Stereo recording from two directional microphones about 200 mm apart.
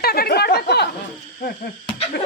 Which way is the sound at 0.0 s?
50° left (ahead or behind).